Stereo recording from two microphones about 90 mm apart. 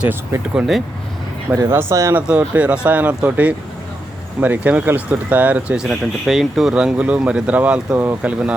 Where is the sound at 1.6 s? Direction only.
25° right (ahead or behind).